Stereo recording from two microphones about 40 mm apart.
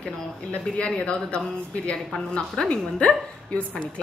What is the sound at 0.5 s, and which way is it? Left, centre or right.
Speech, left.